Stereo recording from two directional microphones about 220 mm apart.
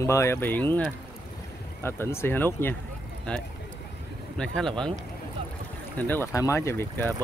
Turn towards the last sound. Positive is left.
turn(degrees=10)  # may be behind; listen again after turning